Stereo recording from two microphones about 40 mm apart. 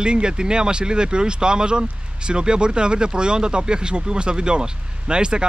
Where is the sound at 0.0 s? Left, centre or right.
Right.